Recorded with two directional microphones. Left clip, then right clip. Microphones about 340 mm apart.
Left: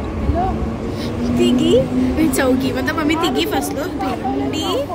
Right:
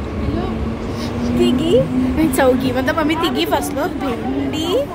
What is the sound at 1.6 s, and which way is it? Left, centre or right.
A woman's voice, centre.